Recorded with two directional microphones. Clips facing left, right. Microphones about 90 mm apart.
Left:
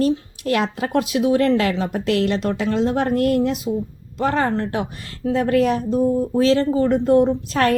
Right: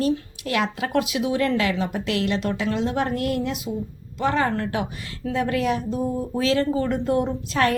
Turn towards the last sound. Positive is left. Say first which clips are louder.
# left 4 dB
turn(degrees=40)  # may be behind; listen again after turning